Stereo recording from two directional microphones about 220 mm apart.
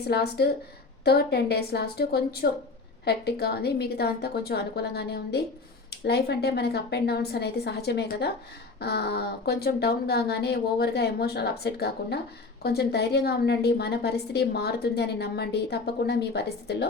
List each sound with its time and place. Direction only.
0.1 s a woman's voice: 45° left (ahead or behind)